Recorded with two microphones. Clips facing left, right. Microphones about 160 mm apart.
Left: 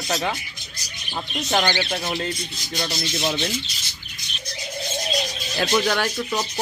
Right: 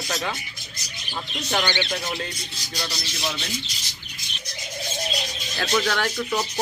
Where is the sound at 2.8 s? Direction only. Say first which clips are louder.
Left 5 dB; 30° left (ahead or behind).